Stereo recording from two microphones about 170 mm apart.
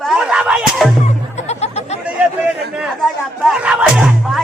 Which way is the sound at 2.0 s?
5° right (ahead or behind).